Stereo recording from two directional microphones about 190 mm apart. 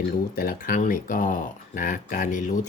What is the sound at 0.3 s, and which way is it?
Speech, 45° left (ahead or behind).